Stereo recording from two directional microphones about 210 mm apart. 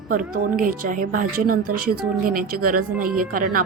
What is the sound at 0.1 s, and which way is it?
A woman's voice, 40° right (ahead or behind).